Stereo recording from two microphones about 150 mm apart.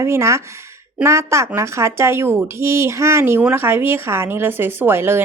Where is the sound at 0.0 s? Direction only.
20° right (ahead or behind).